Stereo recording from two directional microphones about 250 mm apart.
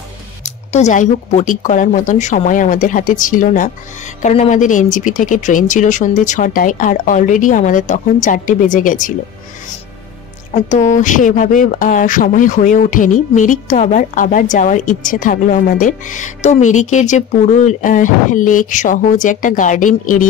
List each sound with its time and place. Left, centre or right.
0.7 s a woman's voice: left
10.5 s a woman's voice: left